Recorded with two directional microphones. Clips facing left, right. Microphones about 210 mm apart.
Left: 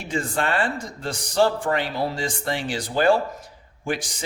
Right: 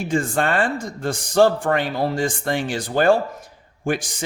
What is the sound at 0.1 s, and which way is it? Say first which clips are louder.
Speech: right 3 dB; 50° right (ahead or behind).